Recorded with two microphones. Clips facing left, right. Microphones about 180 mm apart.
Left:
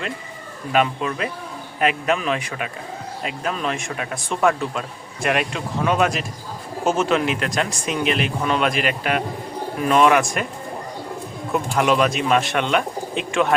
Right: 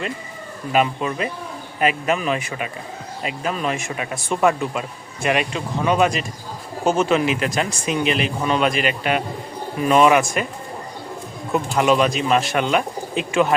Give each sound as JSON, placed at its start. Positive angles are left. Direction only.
{"t": 0.7, "sound": "speech", "side_deg": 0}
{"t": 11.5, "sound": "speech", "side_deg": 0}